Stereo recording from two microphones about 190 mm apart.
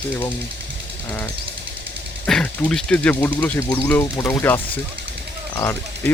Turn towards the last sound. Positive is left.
turn(degrees=10)  # may be behind; listen again after turning